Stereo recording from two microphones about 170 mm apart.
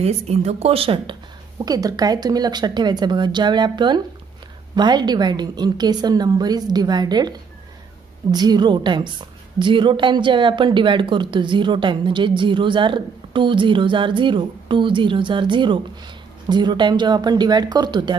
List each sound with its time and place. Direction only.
0.0 s a woman's voice: 40° right (ahead or behind)